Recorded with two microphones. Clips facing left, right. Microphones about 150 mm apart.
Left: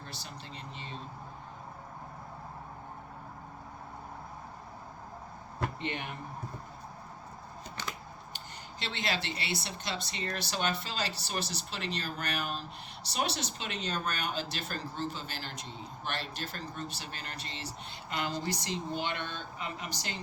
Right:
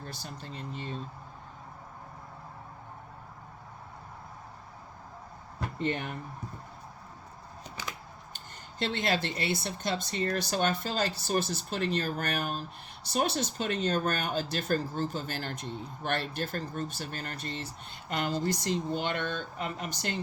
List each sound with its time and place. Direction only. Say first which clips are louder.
0.0 s speech: right 3 dB; 45° right (ahead or behind)
5.8 s speech: right 6 dB; 45° right (ahead or behind)
8.8 s speech: right 6 dB; 50° right (ahead or behind)